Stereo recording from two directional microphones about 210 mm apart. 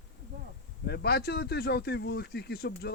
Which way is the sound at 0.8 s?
50° left (ahead or behind).